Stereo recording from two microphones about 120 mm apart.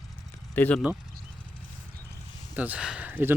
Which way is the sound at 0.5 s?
15° left (ahead or behind).